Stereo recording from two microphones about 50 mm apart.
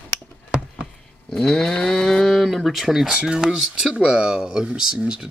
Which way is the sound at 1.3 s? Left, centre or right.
Centre.